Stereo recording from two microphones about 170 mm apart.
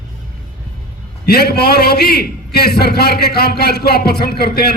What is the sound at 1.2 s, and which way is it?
A man's voice, 70° left (ahead or behind).